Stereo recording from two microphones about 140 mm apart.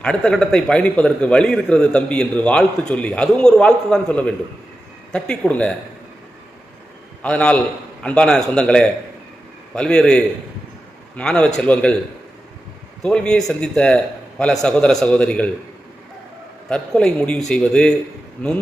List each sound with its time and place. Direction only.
0.0 s a man's voice: 5° left (ahead or behind)
7.2 s a man's voice: 10° left (ahead or behind)
13.0 s a man's voice: 5° left (ahead or behind)
16.6 s a man's voice: 5° left (ahead or behind)